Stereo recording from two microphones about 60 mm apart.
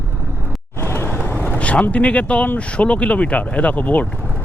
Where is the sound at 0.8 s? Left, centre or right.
Left.